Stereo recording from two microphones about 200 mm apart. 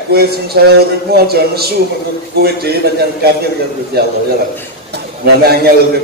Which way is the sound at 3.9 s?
50° right (ahead or behind).